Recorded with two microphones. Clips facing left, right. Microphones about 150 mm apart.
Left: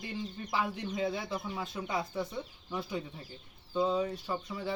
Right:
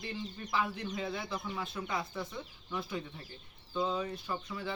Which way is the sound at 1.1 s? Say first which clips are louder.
Left 2 dB; 10° left (ahead or behind).